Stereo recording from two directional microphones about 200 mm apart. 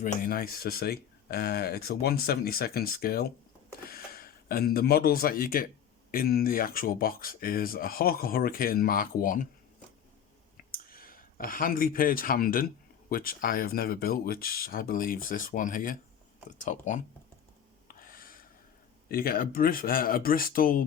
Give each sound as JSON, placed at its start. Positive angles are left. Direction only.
{"t": 0.0, "sound": "speech", "side_deg": 45}
{"t": 10.7, "sound": "speech", "side_deg": 45}
{"t": 18.0, "sound": "a sound", "side_deg": 45}
{"t": 19.0, "sound": "speech", "side_deg": 45}